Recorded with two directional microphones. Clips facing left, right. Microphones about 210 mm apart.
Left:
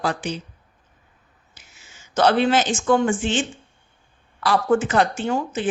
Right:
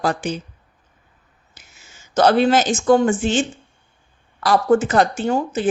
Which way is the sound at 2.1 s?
40° right (ahead or behind).